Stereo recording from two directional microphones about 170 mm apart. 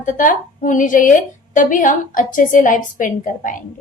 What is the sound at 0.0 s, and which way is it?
A woman's voice, 50° left (ahead or behind).